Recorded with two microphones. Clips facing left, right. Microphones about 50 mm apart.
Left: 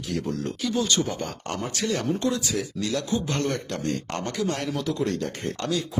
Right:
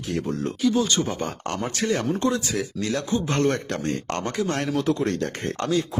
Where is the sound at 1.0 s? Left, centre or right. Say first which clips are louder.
Right 2 dB; right.